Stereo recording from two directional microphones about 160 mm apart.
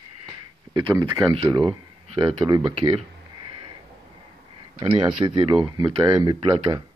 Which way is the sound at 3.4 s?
30° right (ahead or behind).